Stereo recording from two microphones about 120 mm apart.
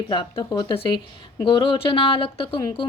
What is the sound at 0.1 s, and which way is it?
Speech, 40° left (ahead or behind).